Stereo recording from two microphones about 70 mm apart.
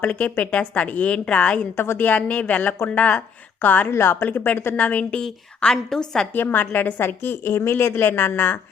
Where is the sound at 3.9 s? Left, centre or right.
Left.